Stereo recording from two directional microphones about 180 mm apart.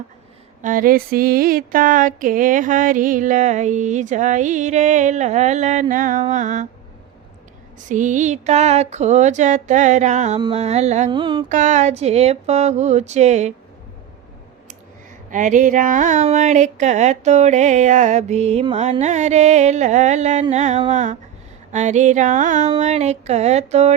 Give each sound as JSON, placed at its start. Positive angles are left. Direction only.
{"t": 0.6, "sound": "a sound", "side_deg": -50}
{"t": 7.9, "sound": "speech", "side_deg": -45}
{"t": 11.1, "sound": "mantra", "side_deg": -25}
{"t": 11.4, "sound": "speech", "side_deg": -45}
{"t": 15.3, "sound": "speech", "side_deg": -45}
{"t": 21.7, "sound": "a sound", "side_deg": -40}
{"t": 22.8, "sound": "speech", "side_deg": -40}